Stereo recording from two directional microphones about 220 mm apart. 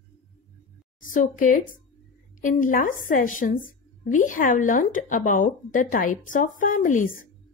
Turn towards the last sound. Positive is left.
turn(degrees=35)  # may be behind; listen again after turning